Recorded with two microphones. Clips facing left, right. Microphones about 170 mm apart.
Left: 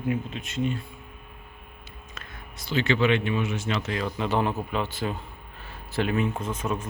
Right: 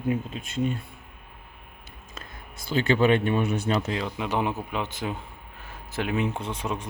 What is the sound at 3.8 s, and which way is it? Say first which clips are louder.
Speech: even; 20° right (ahead or behind).